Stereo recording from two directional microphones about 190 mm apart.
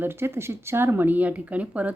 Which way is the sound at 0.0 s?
10° right (ahead or behind).